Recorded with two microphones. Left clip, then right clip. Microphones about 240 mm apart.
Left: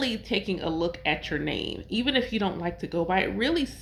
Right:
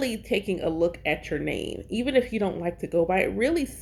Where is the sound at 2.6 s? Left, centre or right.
Left.